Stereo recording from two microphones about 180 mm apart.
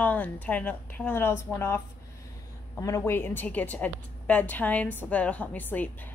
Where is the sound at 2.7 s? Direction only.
15° left (ahead or behind).